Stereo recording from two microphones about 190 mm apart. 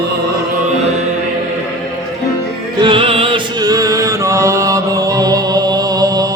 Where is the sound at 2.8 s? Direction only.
30° right (ahead or behind).